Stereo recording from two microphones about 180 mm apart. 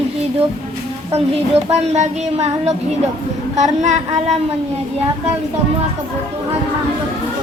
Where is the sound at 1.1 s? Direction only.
35° right (ahead or behind).